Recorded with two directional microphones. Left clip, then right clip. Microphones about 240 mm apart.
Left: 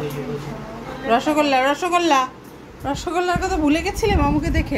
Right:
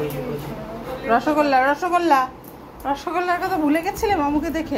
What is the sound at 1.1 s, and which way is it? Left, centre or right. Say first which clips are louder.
A woman's voice: even; centre.